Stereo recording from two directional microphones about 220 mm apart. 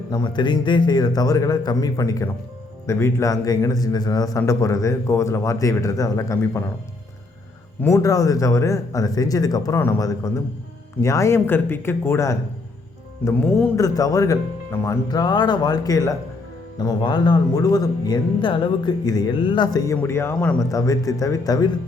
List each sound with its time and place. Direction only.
0.1 s speech: 20° left (ahead or behind)
7.8 s speech: 10° left (ahead or behind)